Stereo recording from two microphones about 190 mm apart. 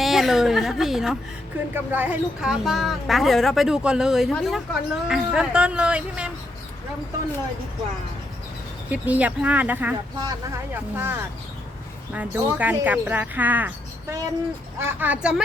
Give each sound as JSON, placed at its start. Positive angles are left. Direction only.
{"t": 0.0, "sound": "speech", "side_deg": 0}
{"t": 8.9, "sound": "speech", "side_deg": -5}
{"t": 10.2, "sound": "speech", "side_deg": -20}